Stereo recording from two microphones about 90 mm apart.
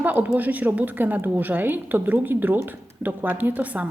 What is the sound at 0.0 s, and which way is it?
A woman's voice, 20° right (ahead or behind).